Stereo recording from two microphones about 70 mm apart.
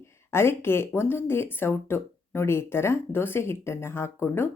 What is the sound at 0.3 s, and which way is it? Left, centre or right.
Speech, left.